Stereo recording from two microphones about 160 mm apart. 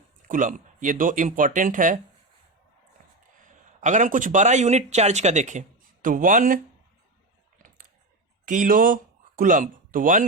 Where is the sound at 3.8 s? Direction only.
50° right (ahead or behind).